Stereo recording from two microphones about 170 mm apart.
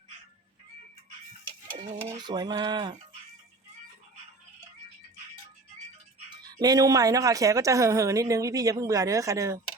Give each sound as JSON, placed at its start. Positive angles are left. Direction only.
{"t": 2.1, "sound": "speech", "side_deg": -25}
{"t": 6.3, "sound": "speech", "side_deg": -25}